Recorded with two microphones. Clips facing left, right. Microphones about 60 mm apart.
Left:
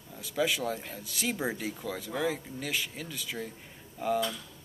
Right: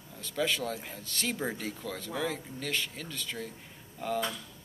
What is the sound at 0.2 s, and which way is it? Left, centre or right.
Speech, centre.